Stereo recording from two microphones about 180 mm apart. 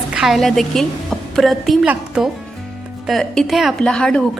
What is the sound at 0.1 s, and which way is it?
A woman's voice, centre (ahead or behind).